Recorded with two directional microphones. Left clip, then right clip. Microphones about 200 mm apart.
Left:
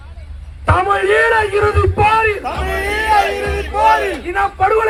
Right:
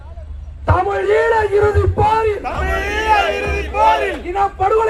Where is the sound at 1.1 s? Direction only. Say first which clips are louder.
Left 1 dB; 20° right (ahead or behind).